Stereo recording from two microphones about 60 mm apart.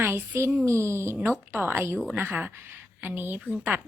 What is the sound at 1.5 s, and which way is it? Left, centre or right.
Speech, right.